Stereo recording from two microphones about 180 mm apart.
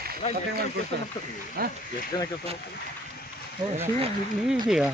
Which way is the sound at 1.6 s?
55° right (ahead or behind).